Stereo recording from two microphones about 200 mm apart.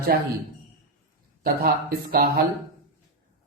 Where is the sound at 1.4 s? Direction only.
45° right (ahead or behind).